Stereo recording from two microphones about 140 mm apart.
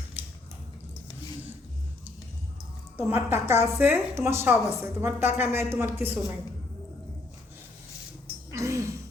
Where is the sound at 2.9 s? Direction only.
15° right (ahead or behind).